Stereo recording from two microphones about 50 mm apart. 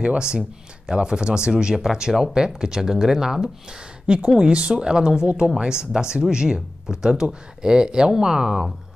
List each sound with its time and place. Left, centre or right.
0.0 s speech: centre